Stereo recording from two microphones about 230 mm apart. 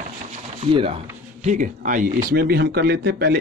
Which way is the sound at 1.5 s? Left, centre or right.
Right.